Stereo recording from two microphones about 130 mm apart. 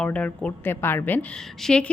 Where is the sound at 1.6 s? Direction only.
5° left (ahead or behind).